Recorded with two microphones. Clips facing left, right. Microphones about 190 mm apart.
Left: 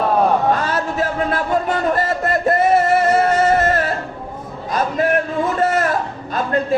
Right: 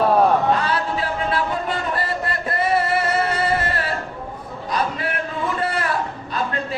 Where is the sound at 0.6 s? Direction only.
45° left (ahead or behind).